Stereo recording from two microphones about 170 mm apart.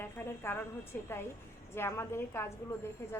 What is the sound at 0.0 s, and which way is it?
A woman's voice, 10° left (ahead or behind).